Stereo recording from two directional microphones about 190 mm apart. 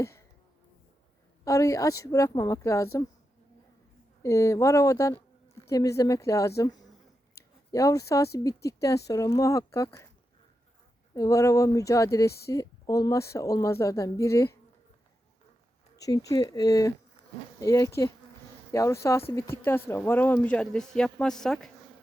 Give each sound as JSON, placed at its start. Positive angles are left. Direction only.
{"t": 1.5, "sound": "speech", "side_deg": 15}
{"t": 4.2, "sound": "a woman's voice", "side_deg": 15}
{"t": 11.1, "sound": "speech", "side_deg": 15}
{"t": 16.0, "sound": "speech", "side_deg": 20}